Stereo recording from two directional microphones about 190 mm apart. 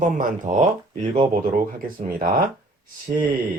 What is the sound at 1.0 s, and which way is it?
Speech, 25° right (ahead or behind).